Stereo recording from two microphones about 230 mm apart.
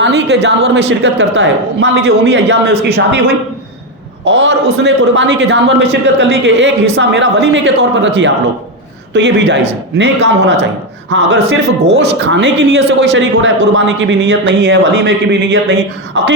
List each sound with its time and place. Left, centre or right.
0.0 s a man's voice: right